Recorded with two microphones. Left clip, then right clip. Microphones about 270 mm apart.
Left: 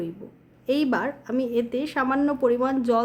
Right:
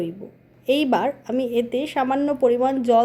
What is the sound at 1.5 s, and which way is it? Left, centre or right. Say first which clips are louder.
Speech: right 3 dB; left.